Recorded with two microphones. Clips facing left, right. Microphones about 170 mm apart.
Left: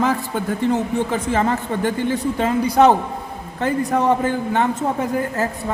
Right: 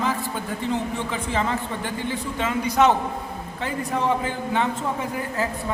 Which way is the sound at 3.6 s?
45° left (ahead or behind).